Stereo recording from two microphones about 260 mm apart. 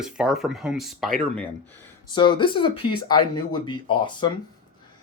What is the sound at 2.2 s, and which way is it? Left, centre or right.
Speech, centre.